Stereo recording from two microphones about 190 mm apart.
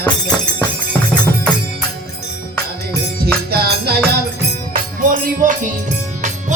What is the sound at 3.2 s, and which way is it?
Music, 55° right (ahead or behind).